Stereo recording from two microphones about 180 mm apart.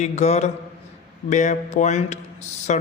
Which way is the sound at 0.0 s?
40° left (ahead or behind).